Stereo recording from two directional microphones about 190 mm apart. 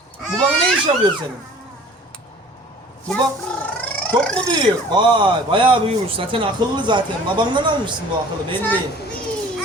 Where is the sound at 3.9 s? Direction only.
5° left (ahead or behind).